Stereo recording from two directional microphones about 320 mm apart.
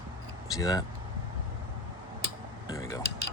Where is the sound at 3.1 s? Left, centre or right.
Right.